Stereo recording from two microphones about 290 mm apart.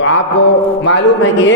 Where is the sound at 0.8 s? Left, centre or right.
Left.